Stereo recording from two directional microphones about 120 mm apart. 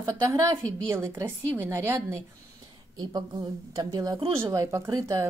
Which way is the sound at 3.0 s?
35° right (ahead or behind).